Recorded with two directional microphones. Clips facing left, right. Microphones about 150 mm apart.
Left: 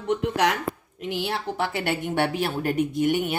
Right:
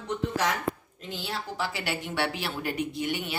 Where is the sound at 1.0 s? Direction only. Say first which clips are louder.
Left 7 dB; 65° left (ahead or behind); by 3.3 s 50° left (ahead or behind).